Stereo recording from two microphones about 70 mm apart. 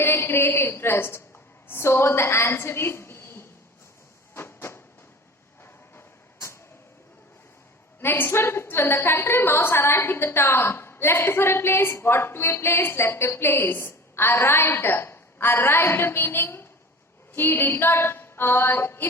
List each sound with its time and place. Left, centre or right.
0.0 s a woman's voice: left
4.4 s vehicle: left
6.0 s vehicle: left
8.0 s a woman's voice: left